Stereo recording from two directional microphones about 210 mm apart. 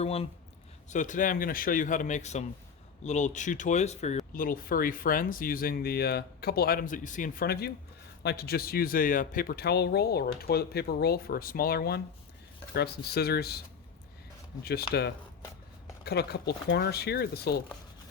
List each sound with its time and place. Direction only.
0.0 s speech: 30° left (ahead or behind); by 13.6 s 50° left (ahead or behind)
14.6 s speech: 50° left (ahead or behind)
16.0 s speech: 50° left (ahead or behind)